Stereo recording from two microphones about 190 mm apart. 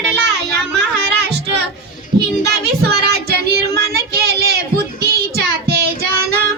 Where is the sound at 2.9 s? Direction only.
55° right (ahead or behind).